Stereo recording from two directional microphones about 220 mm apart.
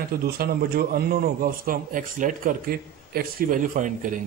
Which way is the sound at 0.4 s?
45° right (ahead or behind).